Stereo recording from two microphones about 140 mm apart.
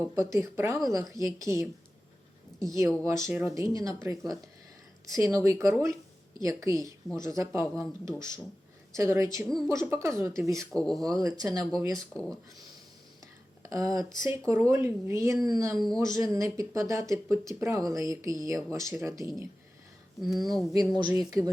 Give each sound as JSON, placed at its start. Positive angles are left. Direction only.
{"t": 0.0, "sound": "speech", "side_deg": -20}
{"t": 10.7, "sound": "speech", "side_deg": 5}
{"t": 11.0, "sound": "speech", "side_deg": -25}
{"t": 11.9, "sound": "speech", "side_deg": 5}
{"t": 13.6, "sound": "speech", "side_deg": -25}
{"t": 20.2, "sound": "speech", "side_deg": 0}
{"t": 20.7, "sound": "speech", "side_deg": -30}